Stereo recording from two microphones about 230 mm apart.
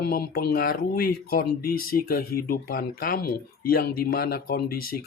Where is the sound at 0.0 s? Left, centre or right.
Left.